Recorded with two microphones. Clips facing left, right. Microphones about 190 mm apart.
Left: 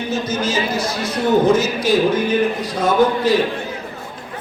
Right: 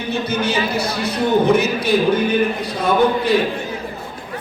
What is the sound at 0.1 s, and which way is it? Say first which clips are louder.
A man's voice: right 2 dB; 60° right (ahead or behind).